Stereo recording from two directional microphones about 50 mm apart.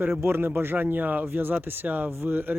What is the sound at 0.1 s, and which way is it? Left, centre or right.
Speech, right.